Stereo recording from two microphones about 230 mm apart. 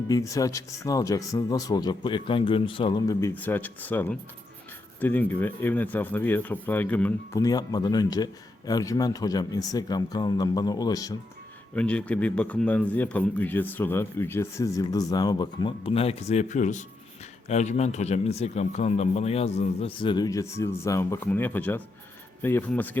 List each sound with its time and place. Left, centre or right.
0.1 s a man's voice: centre
11.7 s a man's voice: centre